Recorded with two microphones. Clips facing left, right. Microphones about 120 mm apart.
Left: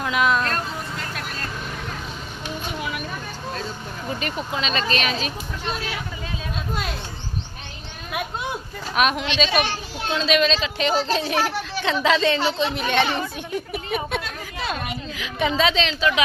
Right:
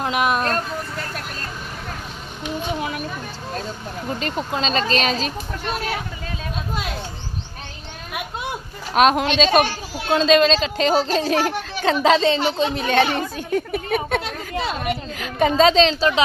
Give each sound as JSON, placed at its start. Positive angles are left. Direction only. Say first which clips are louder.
{"t": 0.0, "sound": "a sound", "louder": "right 1 dB", "side_deg": -20}
{"t": 4.2, "sound": "a woman's voice", "louder": "right 4 dB", "side_deg": -30}
{"t": 5.6, "sound": "speech", "louder": "right 4 dB", "side_deg": -50}
{"t": 9.1, "sound": "a woman's voice", "louder": "right 5 dB", "side_deg": -45}